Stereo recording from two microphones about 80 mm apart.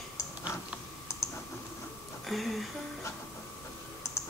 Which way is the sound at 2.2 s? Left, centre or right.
Centre.